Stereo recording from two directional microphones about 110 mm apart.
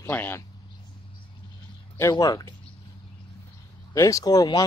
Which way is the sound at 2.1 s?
35° left (ahead or behind).